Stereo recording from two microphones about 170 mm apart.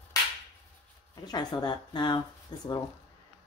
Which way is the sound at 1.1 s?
25° left (ahead or behind).